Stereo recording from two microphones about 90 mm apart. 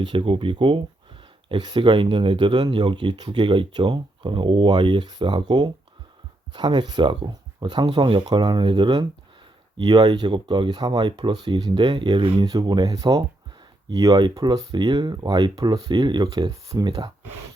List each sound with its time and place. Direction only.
0.0 s speech: 70° right (ahead or behind)
12.5 s speech: 50° right (ahead or behind)
16.5 s speech: 35° right (ahead or behind)
16.8 s speech: 50° right (ahead or behind)